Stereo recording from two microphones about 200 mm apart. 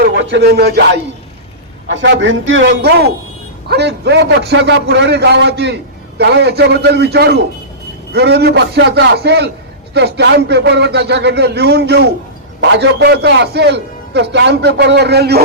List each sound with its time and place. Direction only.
0.0 s speech: 60° right (ahead or behind)
1.9 s a man's voice: 65° right (ahead or behind)
2.8 s a man's voice: 55° right (ahead or behind)